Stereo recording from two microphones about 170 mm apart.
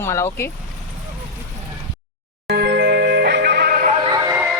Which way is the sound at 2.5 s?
75° right (ahead or behind).